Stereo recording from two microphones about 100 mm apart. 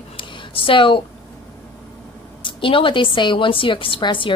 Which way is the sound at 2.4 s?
60° left (ahead or behind).